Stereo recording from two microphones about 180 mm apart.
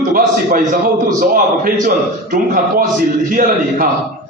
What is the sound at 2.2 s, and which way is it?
A man's voice, 50° right (ahead or behind).